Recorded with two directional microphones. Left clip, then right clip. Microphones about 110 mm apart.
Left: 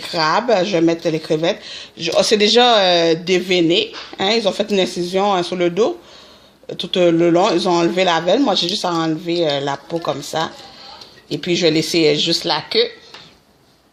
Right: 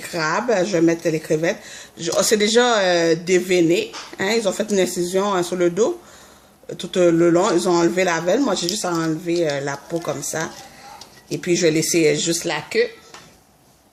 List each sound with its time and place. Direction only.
0.0 s speech: 15° left (ahead or behind)
7.1 s speech: 30° left (ahead or behind)
7.3 s speech: 5° left (ahead or behind)